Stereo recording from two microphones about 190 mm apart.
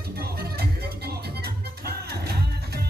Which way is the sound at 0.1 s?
55° right (ahead or behind).